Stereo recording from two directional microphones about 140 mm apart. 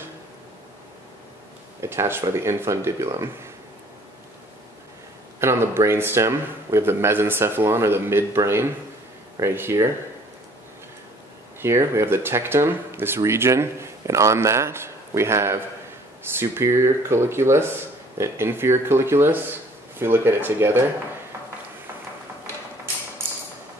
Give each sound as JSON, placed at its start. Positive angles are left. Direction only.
{"t": 1.8, "sound": "speech", "side_deg": -20}
{"t": 5.4, "sound": "speech", "side_deg": -15}
{"t": 11.6, "sound": "speech", "side_deg": -20}